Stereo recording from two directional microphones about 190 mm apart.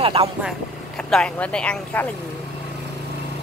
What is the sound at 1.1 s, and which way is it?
Speech, 5° left (ahead or behind).